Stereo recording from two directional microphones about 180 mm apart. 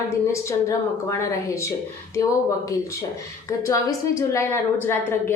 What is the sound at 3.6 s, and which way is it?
A woman's voice, 15° left (ahead or behind).